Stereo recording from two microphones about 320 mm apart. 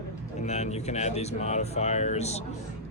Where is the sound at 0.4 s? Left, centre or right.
Left.